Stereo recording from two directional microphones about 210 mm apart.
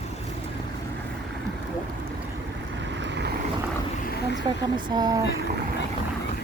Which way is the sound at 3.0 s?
55° right (ahead or behind).